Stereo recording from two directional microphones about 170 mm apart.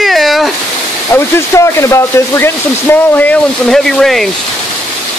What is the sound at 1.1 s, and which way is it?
Speech, 15° left (ahead or behind).